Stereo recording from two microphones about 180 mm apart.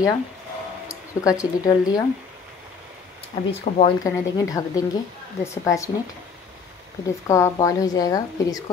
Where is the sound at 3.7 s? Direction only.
40° left (ahead or behind).